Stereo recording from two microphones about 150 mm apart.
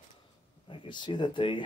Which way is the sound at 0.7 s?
30° left (ahead or behind).